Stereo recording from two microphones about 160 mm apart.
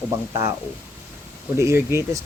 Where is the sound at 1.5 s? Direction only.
15° right (ahead or behind).